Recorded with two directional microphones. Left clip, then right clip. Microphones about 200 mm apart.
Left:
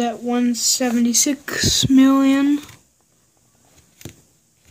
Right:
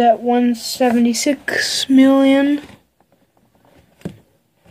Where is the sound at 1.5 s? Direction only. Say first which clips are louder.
Right 1 dB; 30° left (ahead or behind).